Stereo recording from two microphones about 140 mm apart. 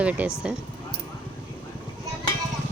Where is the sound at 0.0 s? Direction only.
10° right (ahead or behind).